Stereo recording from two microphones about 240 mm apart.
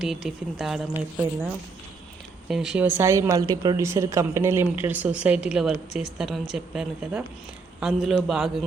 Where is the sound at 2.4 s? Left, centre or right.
Centre.